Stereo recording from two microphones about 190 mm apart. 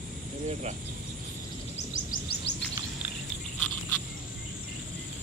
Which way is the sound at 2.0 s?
65° left (ahead or behind).